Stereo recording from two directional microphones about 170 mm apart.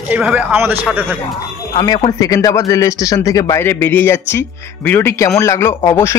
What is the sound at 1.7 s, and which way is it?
A man's voice, 30° left (ahead or behind).